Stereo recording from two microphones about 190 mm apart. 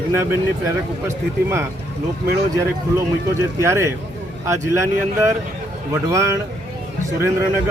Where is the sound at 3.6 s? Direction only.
15° right (ahead or behind).